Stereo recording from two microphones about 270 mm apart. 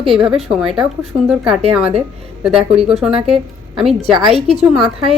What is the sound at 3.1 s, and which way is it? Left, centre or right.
Speech, right.